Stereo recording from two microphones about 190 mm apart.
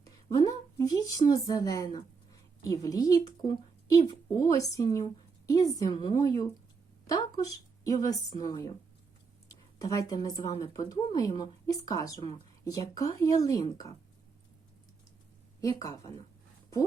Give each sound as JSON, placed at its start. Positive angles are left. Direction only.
{"t": 0.0, "sound": "a woman's voice", "side_deg": 20}
{"t": 15.6, "sound": "speech", "side_deg": 15}